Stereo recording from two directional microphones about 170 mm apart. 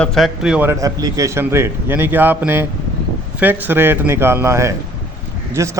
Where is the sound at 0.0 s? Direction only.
Centre (ahead or behind).